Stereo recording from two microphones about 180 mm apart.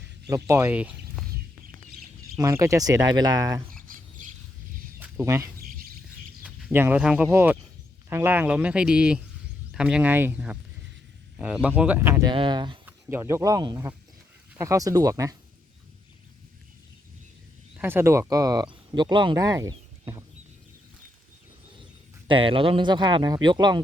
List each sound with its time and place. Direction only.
0.3 s speech: 15° right (ahead or behind)
2.4 s speech: 15° right (ahead or behind)
4.9 s a sound: 15° right (ahead or behind)
5.5 s bird: 55° right (ahead or behind)
6.4 s speech: 10° right (ahead or behind)
12.3 s speech: 25° right (ahead or behind)
12.8 s speech: 15° right (ahead or behind)
17.7 s speech: 10° right (ahead or behind)
22.3 s speech: 30° right (ahead or behind)